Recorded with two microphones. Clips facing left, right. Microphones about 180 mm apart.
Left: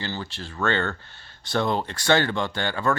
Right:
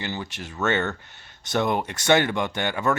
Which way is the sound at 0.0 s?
15° right (ahead or behind).